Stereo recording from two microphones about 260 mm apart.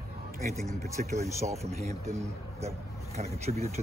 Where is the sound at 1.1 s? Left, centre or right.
Right.